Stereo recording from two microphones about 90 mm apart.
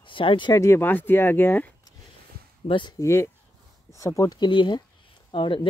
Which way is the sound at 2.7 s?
60° left (ahead or behind).